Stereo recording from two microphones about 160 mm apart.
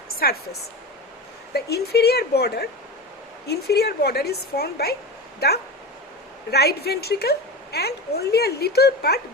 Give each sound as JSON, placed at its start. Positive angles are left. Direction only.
{"t": 0.2, "sound": "a woman's voice", "side_deg": 70}
{"t": 1.7, "sound": "a woman's voice", "side_deg": 90}
{"t": 6.5, "sound": "a woman's voice", "side_deg": 85}